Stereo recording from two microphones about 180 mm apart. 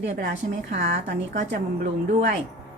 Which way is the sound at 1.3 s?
65° right (ahead or behind).